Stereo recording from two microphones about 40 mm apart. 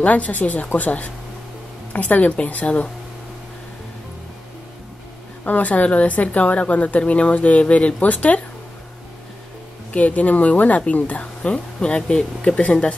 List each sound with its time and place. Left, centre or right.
0.0 s speech: left
5.4 s a woman's voice: left
9.9 s speech: left; by 12.3 s centre
12.4 s speech: left